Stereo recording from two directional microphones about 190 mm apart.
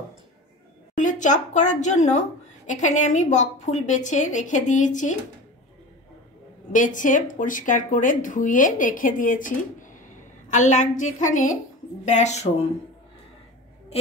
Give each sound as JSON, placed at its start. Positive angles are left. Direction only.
{"t": 0.9, "sound": "a woman's voice", "side_deg": 40}
{"t": 6.7, "sound": "a woman's voice", "side_deg": 40}